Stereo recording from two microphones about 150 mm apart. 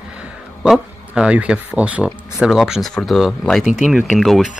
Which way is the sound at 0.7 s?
5° right (ahead or behind).